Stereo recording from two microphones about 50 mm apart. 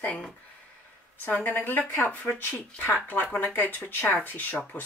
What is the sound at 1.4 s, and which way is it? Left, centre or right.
Speech, left.